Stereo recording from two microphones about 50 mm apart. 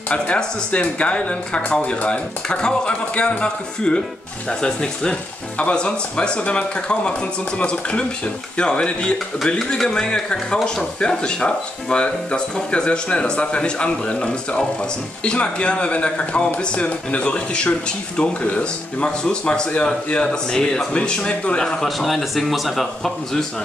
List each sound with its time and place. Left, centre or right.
0.7 s a man's voice: left
21.8 s speech: centre